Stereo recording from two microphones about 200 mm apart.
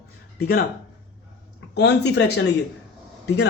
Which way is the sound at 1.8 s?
60° left (ahead or behind).